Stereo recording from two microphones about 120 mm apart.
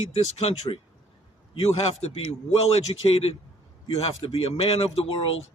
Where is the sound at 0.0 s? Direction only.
60° left (ahead or behind).